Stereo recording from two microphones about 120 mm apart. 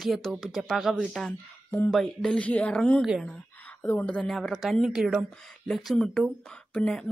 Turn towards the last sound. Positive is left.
turn(degrees=5)  # may be behind; listen again after turning